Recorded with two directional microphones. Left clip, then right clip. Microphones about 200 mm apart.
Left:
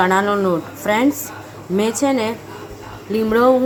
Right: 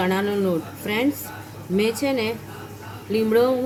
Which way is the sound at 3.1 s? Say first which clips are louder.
Left 4 dB; 15° left (ahead or behind).